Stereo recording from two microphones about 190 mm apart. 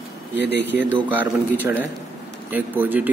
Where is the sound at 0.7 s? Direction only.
10° right (ahead or behind).